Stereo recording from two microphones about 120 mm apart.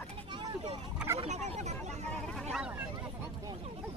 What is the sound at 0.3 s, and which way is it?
Vehicle, 40° right (ahead or behind).